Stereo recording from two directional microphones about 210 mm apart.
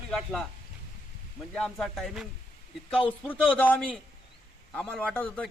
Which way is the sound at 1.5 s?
Centre (ahead or behind).